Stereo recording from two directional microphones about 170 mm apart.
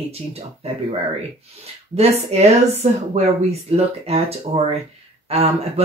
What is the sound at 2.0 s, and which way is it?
Speech, 40° right (ahead or behind).